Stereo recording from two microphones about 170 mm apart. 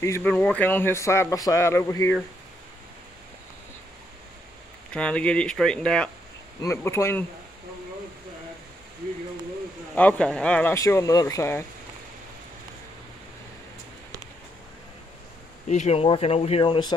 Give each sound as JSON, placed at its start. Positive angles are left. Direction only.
{"t": 0.0, "sound": "speech", "side_deg": 10}
{"t": 4.9, "sound": "speech", "side_deg": 5}
{"t": 6.6, "sound": "speech", "side_deg": 15}
{"t": 9.9, "sound": "speech", "side_deg": 5}
{"t": 15.7, "sound": "speech", "side_deg": 40}